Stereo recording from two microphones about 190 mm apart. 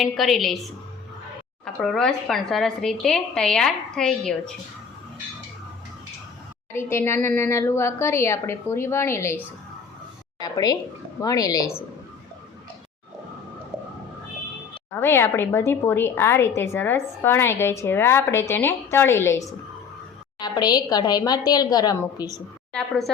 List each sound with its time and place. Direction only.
0.0 s speech: centre (ahead or behind)
1.6 s speech: 5° left (ahead or behind)
6.7 s a woman's voice: 15° left (ahead or behind)
10.4 s a woman's voice: 20° left (ahead or behind)
14.9 s a woman's voice: 10° left (ahead or behind)
22.7 s speech: centre (ahead or behind)